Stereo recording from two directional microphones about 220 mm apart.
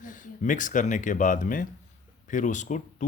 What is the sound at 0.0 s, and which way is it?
Speech, 35° left (ahead or behind).